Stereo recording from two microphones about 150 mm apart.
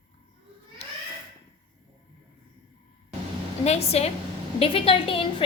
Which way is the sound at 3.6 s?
45° left (ahead or behind).